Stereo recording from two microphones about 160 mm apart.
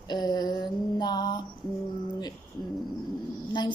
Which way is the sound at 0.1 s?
25° left (ahead or behind).